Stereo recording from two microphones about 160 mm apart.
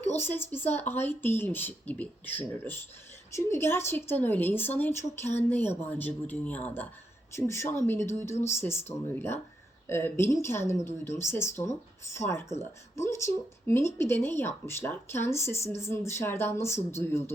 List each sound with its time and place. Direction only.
0.2 s speech: 15° left (ahead or behind)